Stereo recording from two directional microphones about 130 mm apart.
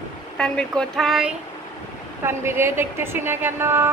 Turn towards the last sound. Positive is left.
turn(degrees=-20)  # may be behind; listen again after turning